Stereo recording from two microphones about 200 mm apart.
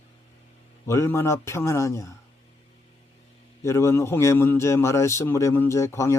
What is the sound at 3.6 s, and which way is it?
A man's voice, 15° left (ahead or behind).